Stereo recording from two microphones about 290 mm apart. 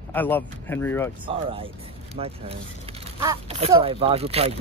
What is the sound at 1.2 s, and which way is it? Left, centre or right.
Speech, centre.